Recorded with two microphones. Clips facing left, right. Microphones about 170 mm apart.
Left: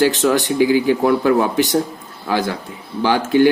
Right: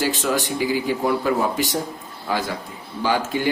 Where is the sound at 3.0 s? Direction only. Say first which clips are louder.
Left 8 dB; 70° left (ahead or behind).